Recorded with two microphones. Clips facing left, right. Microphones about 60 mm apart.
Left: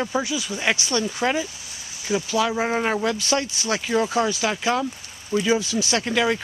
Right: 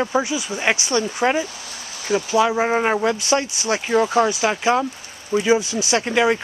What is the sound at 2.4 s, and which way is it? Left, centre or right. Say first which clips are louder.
Speech: right 5 dB; centre.